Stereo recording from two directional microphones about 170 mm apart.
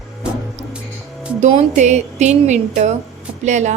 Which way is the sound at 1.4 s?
40° right (ahead or behind).